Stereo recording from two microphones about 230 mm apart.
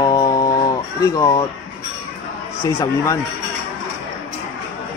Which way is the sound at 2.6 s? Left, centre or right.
Centre.